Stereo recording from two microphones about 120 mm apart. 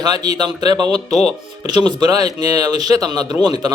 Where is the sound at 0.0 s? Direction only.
35° right (ahead or behind).